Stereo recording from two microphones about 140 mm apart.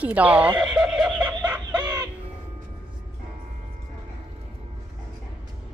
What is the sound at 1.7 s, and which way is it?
Chicken, 30° right (ahead or behind).